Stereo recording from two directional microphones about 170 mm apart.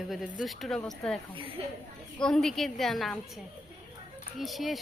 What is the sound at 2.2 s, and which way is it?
Speech, 5° left (ahead or behind).